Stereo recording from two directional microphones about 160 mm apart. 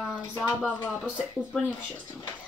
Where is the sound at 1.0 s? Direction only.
Centre (ahead or behind).